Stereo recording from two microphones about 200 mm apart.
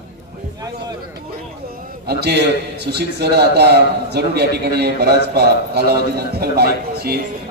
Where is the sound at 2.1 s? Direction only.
55° right (ahead or behind).